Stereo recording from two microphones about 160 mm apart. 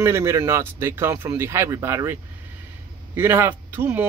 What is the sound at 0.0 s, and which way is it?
Speech, 15° right (ahead or behind).